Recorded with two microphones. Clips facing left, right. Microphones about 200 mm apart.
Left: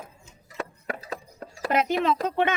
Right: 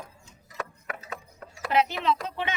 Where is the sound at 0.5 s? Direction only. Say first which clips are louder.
Left 4 dB; 30° left (ahead or behind).